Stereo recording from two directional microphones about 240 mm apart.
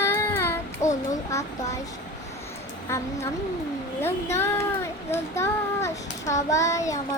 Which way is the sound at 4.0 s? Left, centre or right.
Centre.